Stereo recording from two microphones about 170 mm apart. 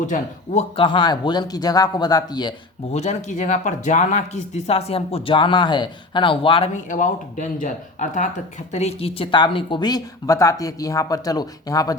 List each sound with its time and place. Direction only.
0.0 s speech: 45° left (ahead or behind)
0.8 s a woman's voice: 30° left (ahead or behind)
2.9 s speech: 40° left (ahead or behind)
6.8 s a woman's voice: 50° left (ahead or behind); by 11.9 s 20° left (ahead or behind)